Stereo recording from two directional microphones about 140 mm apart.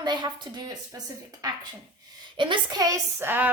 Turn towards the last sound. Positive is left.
turn(degrees=-15)  # may be behind; listen again after turning